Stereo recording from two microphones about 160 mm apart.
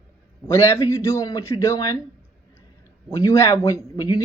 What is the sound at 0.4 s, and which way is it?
Speech, 15° left (ahead or behind).